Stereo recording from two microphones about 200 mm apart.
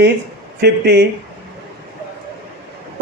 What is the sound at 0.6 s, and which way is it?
Speech, 55° right (ahead or behind).